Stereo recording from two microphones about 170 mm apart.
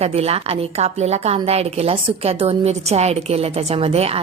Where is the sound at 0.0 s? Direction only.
35° right (ahead or behind).